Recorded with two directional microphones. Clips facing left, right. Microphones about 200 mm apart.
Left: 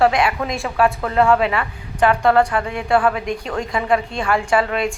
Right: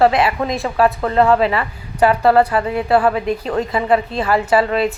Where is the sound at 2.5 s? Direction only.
35° right (ahead or behind).